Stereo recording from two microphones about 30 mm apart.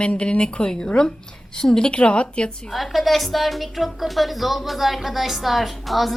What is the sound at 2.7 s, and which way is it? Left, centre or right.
Speech, centre.